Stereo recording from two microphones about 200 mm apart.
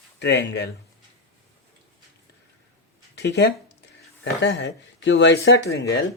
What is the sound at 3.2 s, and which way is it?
Speech, 60° left (ahead or behind).